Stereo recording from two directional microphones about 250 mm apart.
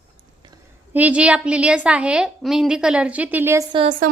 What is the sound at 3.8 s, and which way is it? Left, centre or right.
Speech, right.